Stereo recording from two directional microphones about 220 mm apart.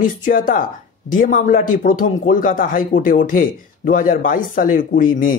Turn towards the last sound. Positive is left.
turn(degrees=40)  # may be behind; listen again after turning